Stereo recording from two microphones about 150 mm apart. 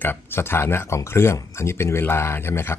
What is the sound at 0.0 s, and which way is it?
Speech, 15° left (ahead or behind).